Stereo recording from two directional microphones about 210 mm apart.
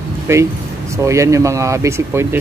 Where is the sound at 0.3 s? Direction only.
15° right (ahead or behind).